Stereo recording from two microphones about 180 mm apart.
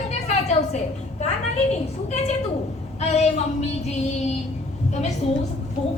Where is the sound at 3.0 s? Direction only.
35° left (ahead or behind).